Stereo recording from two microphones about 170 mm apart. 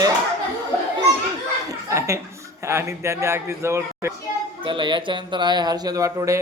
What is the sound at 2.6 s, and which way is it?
Speech, 15° right (ahead or behind).